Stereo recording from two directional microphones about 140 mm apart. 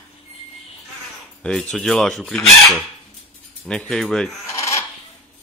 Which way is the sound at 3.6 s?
5° left (ahead or behind).